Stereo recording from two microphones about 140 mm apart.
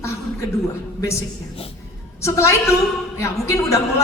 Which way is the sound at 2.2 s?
20° left (ahead or behind).